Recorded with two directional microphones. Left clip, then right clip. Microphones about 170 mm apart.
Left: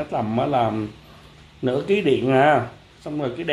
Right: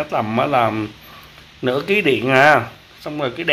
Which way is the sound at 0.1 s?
20° right (ahead or behind).